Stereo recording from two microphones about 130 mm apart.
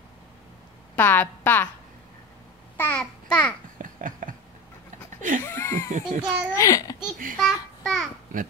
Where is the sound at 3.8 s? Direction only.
90° right.